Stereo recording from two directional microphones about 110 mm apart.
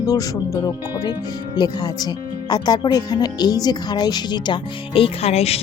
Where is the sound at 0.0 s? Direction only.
35° left (ahead or behind).